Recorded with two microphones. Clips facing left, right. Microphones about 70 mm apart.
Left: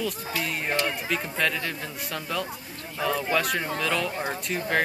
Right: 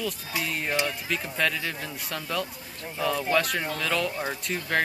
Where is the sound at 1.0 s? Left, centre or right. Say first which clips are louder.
Left 1 dB; centre.